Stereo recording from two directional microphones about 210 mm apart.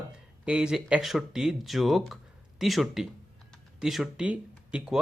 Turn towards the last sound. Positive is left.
turn(degrees=-5)  # may be behind; listen again after turning